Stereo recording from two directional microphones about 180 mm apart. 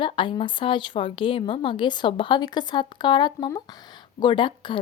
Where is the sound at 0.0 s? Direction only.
25° left (ahead or behind).